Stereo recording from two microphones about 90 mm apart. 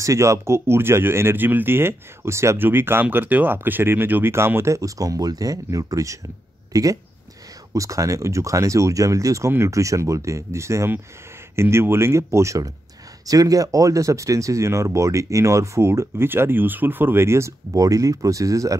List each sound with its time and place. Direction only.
0.0 s speech: 35° right (ahead or behind)